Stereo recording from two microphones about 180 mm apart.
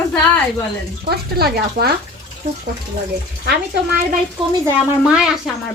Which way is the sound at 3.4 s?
60° right (ahead or behind).